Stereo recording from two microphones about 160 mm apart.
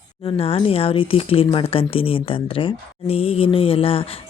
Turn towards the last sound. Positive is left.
turn(degrees=35)  # may be behind; listen again after turning